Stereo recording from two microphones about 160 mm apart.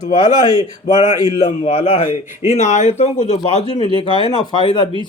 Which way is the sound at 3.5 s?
35° left (ahead or behind).